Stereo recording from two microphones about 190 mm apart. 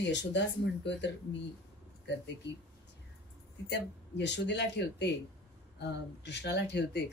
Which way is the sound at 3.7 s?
65° left (ahead or behind).